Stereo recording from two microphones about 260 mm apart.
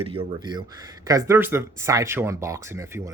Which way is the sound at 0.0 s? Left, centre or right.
Right.